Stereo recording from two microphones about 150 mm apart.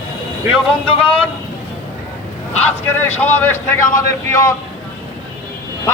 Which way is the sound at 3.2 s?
15° left (ahead or behind).